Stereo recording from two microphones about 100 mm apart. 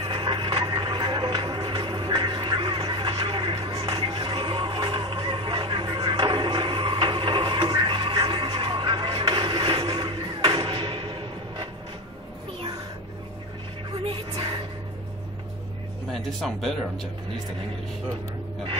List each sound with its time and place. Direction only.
0.0 s music: 55° right (ahead or behind)
3.8 s music: 55° right (ahead or behind)
14.0 s music: 60° right (ahead or behind)
16.1 s speech: centre (ahead or behind)